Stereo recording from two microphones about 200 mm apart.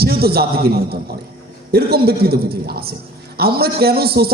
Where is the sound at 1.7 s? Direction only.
50° right (ahead or behind).